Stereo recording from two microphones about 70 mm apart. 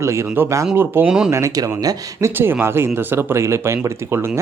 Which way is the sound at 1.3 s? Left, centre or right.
Right.